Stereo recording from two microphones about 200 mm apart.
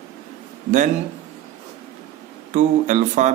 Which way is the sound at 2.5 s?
35° right (ahead or behind).